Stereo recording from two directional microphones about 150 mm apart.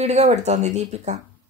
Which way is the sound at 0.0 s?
50° right (ahead or behind).